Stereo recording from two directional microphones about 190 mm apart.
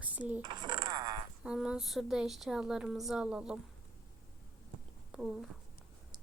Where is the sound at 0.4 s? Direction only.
25° right (ahead or behind).